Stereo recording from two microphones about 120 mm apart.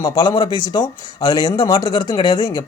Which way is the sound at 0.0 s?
30° left (ahead or behind).